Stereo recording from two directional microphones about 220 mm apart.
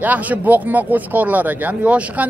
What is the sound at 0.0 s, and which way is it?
Speech, 5° right (ahead or behind).